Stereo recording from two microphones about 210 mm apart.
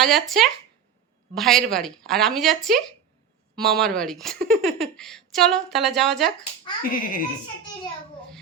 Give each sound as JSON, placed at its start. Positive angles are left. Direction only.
{"t": 0.0, "sound": "speech", "side_deg": 0}
{"t": 6.8, "sound": "a child's voice", "side_deg": 45}